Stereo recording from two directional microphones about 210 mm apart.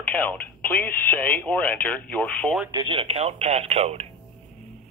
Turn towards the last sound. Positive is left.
turn(degrees=-30)  # may be behind; listen again after turning